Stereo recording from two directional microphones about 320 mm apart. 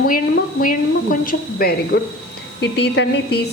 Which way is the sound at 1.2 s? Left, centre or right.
Left.